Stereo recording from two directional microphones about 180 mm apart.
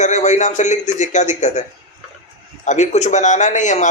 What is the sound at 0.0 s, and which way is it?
A man's voice, 40° left (ahead or behind).